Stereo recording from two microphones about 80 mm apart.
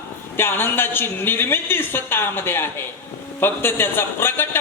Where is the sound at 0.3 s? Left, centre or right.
Left.